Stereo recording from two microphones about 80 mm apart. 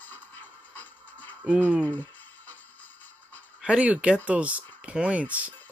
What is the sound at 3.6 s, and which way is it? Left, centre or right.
Speech, centre.